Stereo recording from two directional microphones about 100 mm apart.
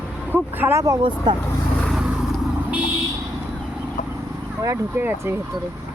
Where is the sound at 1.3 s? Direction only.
50° right (ahead or behind).